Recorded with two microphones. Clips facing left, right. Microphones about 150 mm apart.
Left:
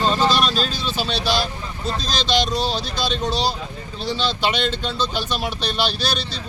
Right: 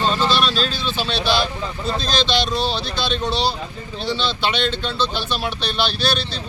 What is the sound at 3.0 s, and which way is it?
Speech, centre (ahead or behind).